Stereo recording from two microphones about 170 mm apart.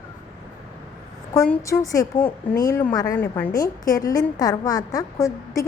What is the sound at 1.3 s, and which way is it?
A woman's voice, 15° left (ahead or behind).